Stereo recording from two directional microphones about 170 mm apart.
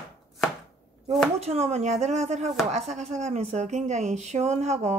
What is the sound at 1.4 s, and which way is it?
Speech, 40° right (ahead or behind).